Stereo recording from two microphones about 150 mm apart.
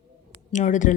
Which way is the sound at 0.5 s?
55° left (ahead or behind).